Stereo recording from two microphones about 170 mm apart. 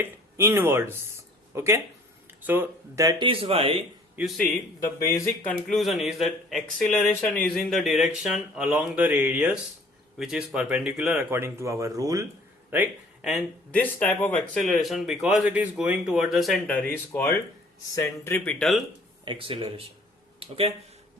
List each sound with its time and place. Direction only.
0.0 s speech: 15° right (ahead or behind); by 3.8 s 35° right (ahead or behind)
4.2 s speech: centre (ahead or behind)
4.8 s speech: 15° left (ahead or behind)
5.5 s speech: 5° left (ahead or behind); by 12.2 s 20° right (ahead or behind)
12.7 s speech: 5° right (ahead or behind)
13.7 s speech: 10° left (ahead or behind)
19.2 s speech: 30° right (ahead or behind)